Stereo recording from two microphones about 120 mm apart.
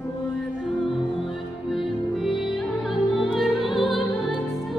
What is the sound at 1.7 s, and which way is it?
Music, centre (ahead or behind).